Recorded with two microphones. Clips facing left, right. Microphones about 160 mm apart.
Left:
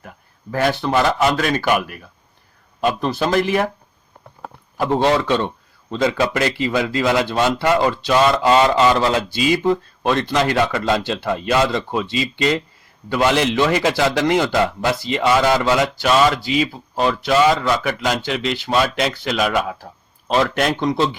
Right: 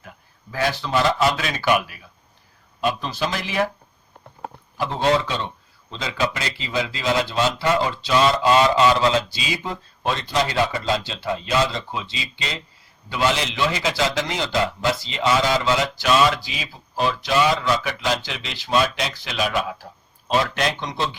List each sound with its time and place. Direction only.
0.5 s a man's voice: 55° left (ahead or behind)
4.8 s a man's voice: 55° left (ahead or behind)